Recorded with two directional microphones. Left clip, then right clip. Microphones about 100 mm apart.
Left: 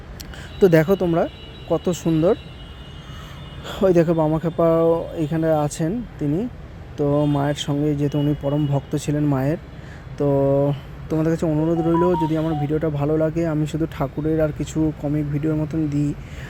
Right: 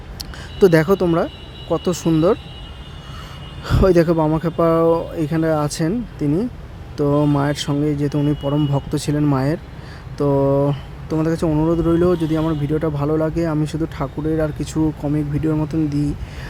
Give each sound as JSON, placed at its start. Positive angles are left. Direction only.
{"t": 0.2, "sound": "a sound", "side_deg": -10}
{"t": 1.1, "sound": "speech", "side_deg": -5}
{"t": 3.6, "sound": "speech", "side_deg": -20}
{"t": 11.1, "sound": "speech", "side_deg": -5}
{"t": 11.4, "sound": "speech", "side_deg": -20}
{"t": 14.6, "sound": "speech", "side_deg": -15}